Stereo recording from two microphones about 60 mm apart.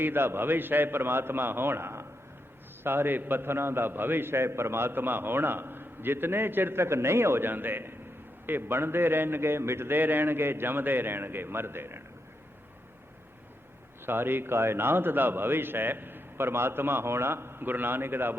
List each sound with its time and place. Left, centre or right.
0.0 s a man's voice: right
14.0 s a man's voice: right